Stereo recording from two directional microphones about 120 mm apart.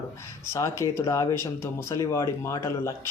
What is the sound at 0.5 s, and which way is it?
Speech, 25° left (ahead or behind).